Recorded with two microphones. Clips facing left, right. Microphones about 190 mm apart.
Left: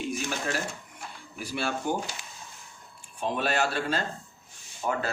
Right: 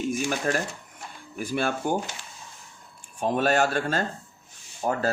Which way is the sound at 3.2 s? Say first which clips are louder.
Right 5 dB; 45° right (ahead or behind).